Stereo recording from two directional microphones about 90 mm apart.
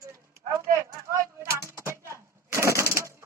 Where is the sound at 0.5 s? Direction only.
35° right (ahead or behind).